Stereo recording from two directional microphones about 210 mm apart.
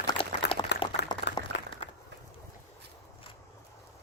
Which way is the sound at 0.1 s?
25° left (ahead or behind).